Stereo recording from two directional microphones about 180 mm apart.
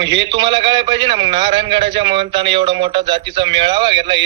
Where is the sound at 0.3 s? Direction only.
25° right (ahead or behind).